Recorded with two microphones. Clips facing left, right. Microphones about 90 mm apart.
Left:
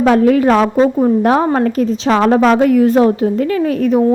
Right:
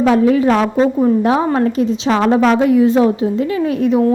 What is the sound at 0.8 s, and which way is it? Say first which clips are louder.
Speech: left 1 dB; 15° left (ahead or behind).